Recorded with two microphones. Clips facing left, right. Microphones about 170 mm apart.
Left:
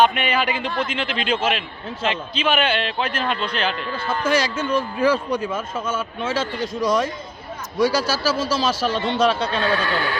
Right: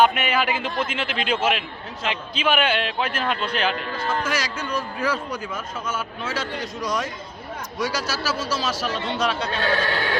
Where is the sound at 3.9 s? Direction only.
30° left (ahead or behind).